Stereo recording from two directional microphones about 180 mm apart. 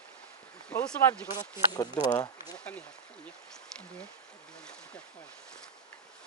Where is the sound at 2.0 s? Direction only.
20° left (ahead or behind).